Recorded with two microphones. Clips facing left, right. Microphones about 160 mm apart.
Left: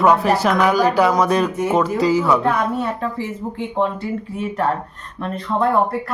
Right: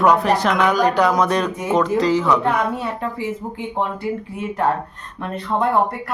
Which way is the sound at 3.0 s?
15° right (ahead or behind).